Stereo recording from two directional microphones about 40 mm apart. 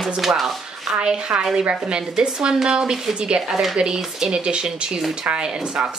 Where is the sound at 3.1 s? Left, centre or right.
Right.